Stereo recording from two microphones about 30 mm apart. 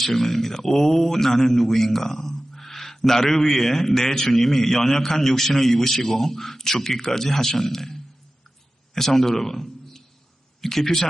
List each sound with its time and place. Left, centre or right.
0.0 s a man's voice: centre